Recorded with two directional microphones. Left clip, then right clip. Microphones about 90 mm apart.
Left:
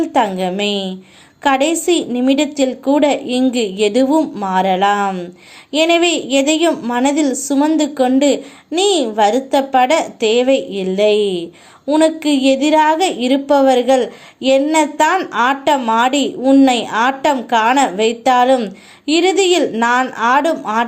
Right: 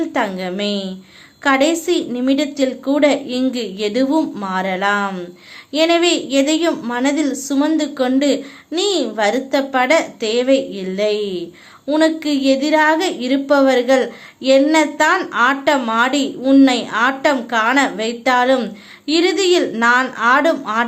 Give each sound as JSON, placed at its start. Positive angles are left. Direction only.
{"t": 0.0, "sound": "a woman's voice", "side_deg": 45}
{"t": 4.1, "sound": "a woman's voice", "side_deg": 25}
{"t": 4.4, "sound": "speech", "side_deg": 40}
{"t": 5.0, "sound": "a woman's voice", "side_deg": 20}
{"t": 5.7, "sound": "a woman's voice", "side_deg": 40}
{"t": 6.7, "sound": "a woman's voice", "side_deg": 25}
{"t": 7.0, "sound": "a woman's voice", "side_deg": 40}
{"t": 7.5, "sound": "a woman's voice", "side_deg": 30}
{"t": 16.4, "sound": "a woman's voice", "side_deg": 20}
{"t": 16.6, "sound": "a woman's voice", "side_deg": 40}